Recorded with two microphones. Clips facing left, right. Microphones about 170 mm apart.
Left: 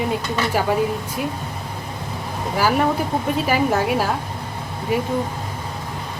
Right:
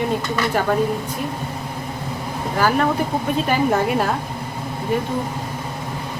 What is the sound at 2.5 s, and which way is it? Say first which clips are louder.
Speech: even; 10° left (ahead or behind).